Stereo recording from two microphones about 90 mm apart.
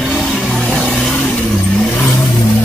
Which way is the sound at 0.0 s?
Centre (ahead or behind).